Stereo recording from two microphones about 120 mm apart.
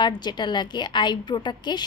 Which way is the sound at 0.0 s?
35° left (ahead or behind).